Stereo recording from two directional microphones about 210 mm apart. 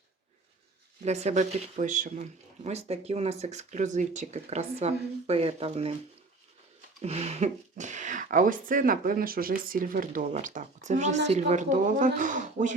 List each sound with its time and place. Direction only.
1.0 s speech: 30° right (ahead or behind)
7.0 s speech: 30° right (ahead or behind)